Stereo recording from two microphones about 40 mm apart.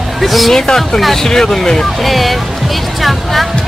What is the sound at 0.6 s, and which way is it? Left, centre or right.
Speech, centre.